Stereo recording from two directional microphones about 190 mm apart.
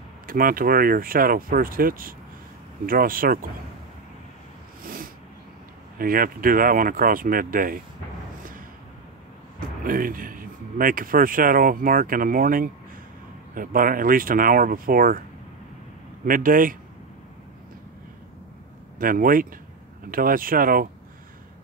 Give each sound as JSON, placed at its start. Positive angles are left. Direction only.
{"t": 0.3, "sound": "speech", "side_deg": -50}
{"t": 4.8, "sound": "a sound", "side_deg": -50}
{"t": 5.9, "sound": "speech", "side_deg": -50}
{"t": 9.6, "sound": "speech", "side_deg": -45}
{"t": 16.3, "sound": "speech", "side_deg": -45}
{"t": 18.9, "sound": "speech", "side_deg": -45}